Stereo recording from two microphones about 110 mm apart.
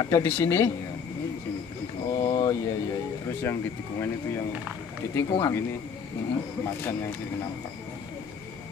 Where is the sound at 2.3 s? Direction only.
40° left (ahead or behind).